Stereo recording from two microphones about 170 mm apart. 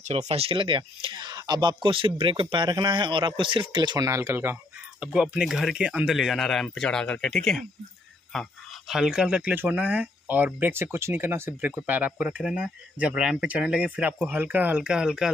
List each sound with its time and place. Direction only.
0.0 s speech: 40° right (ahead or behind); by 15.3 s 5° right (ahead or behind)